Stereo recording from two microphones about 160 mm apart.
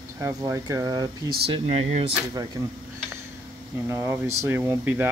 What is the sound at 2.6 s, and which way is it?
Speech, 20° right (ahead or behind).